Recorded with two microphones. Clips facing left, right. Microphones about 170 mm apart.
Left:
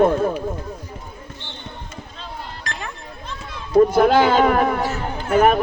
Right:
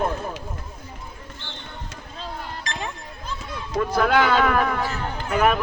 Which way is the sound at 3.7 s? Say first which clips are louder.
Left 7 dB; 30° left (ahead or behind).